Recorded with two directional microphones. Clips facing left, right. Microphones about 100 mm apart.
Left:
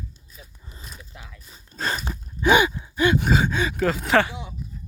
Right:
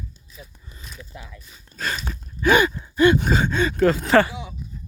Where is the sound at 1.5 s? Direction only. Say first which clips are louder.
Left 1 dB; 30° left (ahead or behind).